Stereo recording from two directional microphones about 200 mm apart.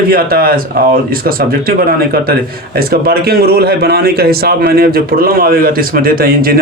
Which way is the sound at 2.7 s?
50° right (ahead or behind).